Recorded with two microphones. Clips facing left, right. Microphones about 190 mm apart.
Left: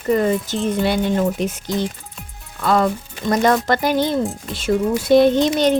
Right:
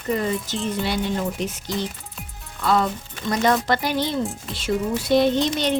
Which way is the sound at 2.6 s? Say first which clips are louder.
Left 4 dB; 50° left (ahead or behind).